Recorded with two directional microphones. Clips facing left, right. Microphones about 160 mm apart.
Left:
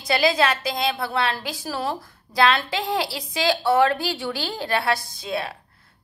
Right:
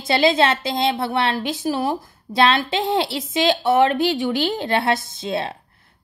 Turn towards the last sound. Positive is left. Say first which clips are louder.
# right 4 dB
turn(degrees=-25)  # may be behind; listen again after turning